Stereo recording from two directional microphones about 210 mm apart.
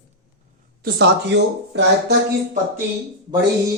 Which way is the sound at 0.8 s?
50° right (ahead or behind).